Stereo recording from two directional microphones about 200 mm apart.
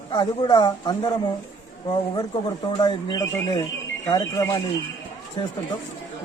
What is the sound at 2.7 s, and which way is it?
Speech, 20° left (ahead or behind).